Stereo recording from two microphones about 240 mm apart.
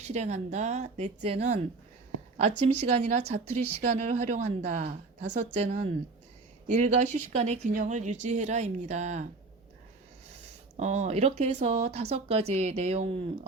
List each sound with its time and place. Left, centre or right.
0.0 s speech: right
10.8 s speech: right